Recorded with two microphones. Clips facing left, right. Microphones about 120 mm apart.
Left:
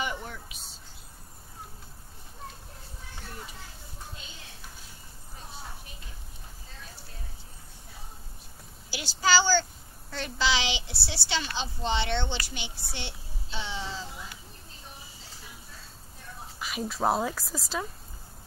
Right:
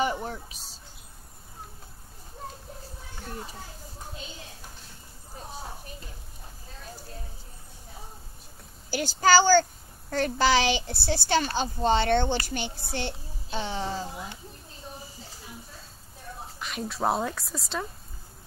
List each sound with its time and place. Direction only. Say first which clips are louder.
0.0 s speech: right 6 dB; 35° right (ahead or behind)
8.9 s a child's voice: right 5 dB; 50° right (ahead or behind)
16.5 s a woman's voice: left 1 dB; 5° left (ahead or behind)